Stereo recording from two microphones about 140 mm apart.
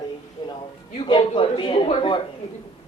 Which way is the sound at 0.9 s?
35° left (ahead or behind).